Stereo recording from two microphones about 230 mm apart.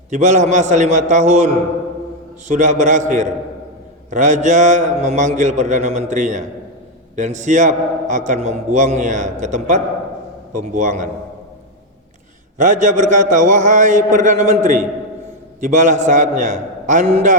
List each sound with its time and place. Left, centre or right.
0.1 s a man's voice: right
2.5 s a man's voice: right
12.5 s a man's voice: right